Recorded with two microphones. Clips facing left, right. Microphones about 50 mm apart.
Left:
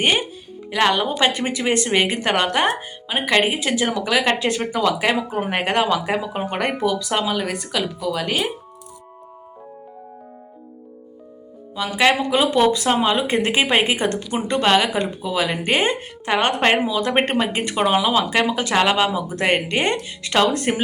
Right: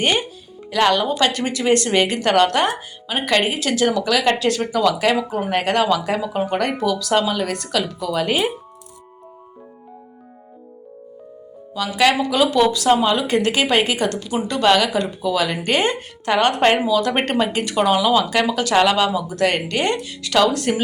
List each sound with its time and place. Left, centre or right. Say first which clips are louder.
0.0 s speech: even; centre
11.8 s speech: right 1 dB; left